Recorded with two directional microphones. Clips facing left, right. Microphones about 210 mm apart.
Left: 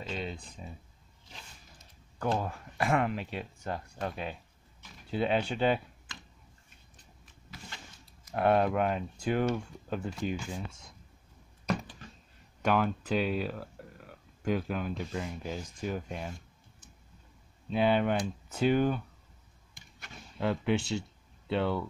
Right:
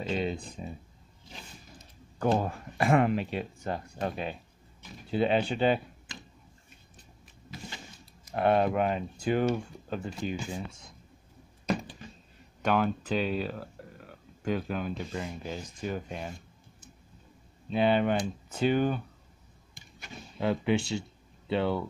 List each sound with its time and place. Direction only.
0.1 s speech: 5° right (ahead or behind)
2.1 s speech: 15° right (ahead or behind)
2.8 s speech: 5° right (ahead or behind)
5.1 s speech: centre (ahead or behind)
8.3 s speech: centre (ahead or behind)
12.6 s speech: 5° left (ahead or behind)
17.6 s speech: centre (ahead or behind)
20.0 s speech: 5° right (ahead or behind)